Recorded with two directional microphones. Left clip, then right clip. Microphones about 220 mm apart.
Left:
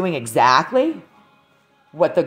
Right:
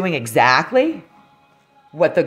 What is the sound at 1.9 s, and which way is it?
Speech, 20° right (ahead or behind).